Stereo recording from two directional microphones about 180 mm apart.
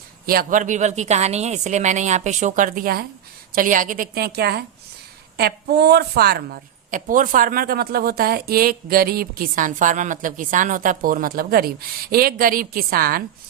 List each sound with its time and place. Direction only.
0.3 s a woman's voice: 50° right (ahead or behind)